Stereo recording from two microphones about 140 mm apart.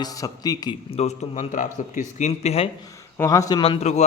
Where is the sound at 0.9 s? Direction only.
50° left (ahead or behind).